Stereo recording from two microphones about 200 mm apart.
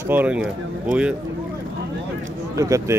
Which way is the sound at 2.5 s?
15° right (ahead or behind).